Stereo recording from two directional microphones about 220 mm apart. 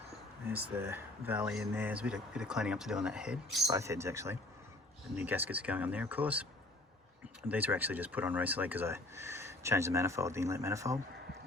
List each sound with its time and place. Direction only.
0.8 s speech: 10° right (ahead or behind)